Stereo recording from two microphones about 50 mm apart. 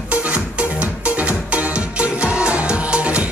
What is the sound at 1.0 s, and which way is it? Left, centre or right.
Music, right.